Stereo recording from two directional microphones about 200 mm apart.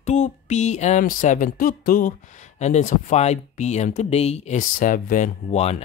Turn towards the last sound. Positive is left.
turn(degrees=35)  # may be behind; listen again after turning